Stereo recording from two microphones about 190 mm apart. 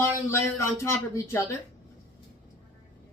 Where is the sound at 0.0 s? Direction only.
15° left (ahead or behind).